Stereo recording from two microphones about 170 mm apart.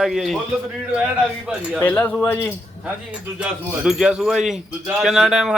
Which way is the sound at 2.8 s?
10° right (ahead or behind).